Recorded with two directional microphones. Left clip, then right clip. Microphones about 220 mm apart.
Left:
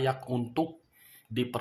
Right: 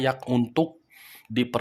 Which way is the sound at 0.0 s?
40° right (ahead or behind).